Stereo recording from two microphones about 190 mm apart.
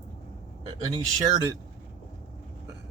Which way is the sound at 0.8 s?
20° right (ahead or behind).